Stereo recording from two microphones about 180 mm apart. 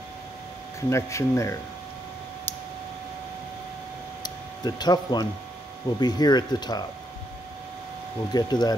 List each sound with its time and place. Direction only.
0.7 s speech: 15° left (ahead or behind)
4.2 s a sound: 25° left (ahead or behind)
5.9 s speech: 25° left (ahead or behind)
8.3 s speech: 20° left (ahead or behind)